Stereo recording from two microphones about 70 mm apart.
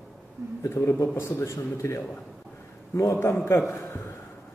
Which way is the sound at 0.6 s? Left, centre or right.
Left.